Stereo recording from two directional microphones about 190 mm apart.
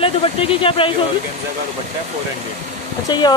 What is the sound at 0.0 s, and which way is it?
Speech, 30° left (ahead or behind).